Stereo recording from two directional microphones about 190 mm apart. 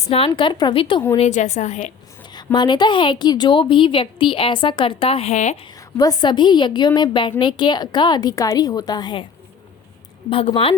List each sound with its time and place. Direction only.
0.0 s a woman's voice: 30° left (ahead or behind)
2.3 s a woman's voice: 25° left (ahead or behind)
6.0 s a woman's voice: 20° left (ahead or behind)
10.2 s a woman's voice: 30° left (ahead or behind)